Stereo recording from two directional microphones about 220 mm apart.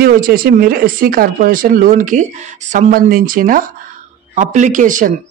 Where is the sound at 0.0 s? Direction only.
40° right (ahead or behind).